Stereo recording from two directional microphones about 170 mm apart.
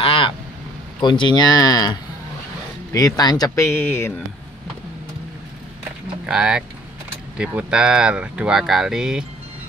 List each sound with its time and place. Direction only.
0.0 s a sound: 30° left (ahead or behind)
1.0 s speech: 30° left (ahead or behind)
6.2 s speech: 5° right (ahead or behind)